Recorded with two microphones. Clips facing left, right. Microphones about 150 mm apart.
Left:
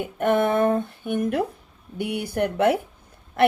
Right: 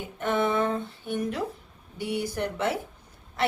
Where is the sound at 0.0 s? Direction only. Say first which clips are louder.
Left 6 dB; 55° left (ahead or behind).